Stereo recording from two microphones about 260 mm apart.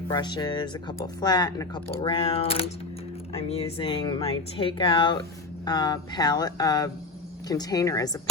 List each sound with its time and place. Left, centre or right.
0.1 s speech: centre